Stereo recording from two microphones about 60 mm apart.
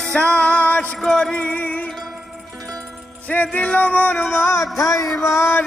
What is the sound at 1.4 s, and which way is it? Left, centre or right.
Music, left.